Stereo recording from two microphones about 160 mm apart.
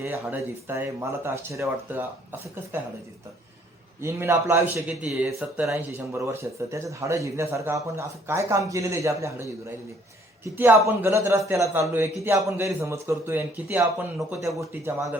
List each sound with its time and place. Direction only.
0.0 s a man's voice: 15° right (ahead or behind)
4.0 s a man's voice: 15° right (ahead or behind)
5.7 s a man's voice: 20° right (ahead or behind)